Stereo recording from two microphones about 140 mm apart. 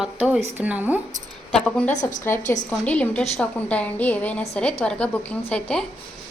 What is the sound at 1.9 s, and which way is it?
Speech, 60° left (ahead or behind).